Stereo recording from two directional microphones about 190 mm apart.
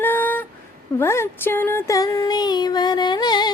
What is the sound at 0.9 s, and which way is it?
Child singing, 15° left (ahead or behind).